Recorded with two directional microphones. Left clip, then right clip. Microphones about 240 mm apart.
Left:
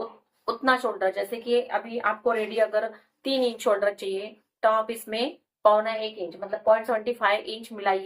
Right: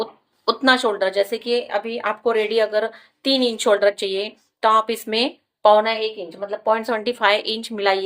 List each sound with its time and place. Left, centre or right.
0.0 s speech: right